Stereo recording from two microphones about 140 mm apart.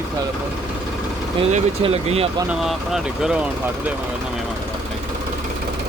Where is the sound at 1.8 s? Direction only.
45° right (ahead or behind).